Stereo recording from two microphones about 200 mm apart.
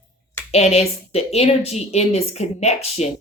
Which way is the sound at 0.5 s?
30° left (ahead or behind).